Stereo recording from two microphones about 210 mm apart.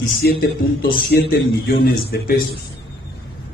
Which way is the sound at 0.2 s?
45° left (ahead or behind).